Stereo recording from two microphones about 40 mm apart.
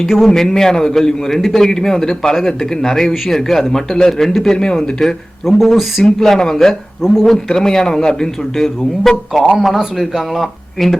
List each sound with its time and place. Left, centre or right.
0.0 s speech: centre
0.3 s a man's voice: centre
5.5 s speech: centre
6.1 s a man's voice: centre
7.0 s speech: centre
7.3 s a man's voice: centre
10.4 s speech: centre